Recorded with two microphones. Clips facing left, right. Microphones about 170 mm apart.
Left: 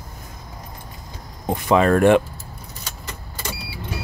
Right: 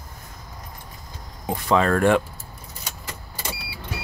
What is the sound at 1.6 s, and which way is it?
Speech, 15° left (ahead or behind).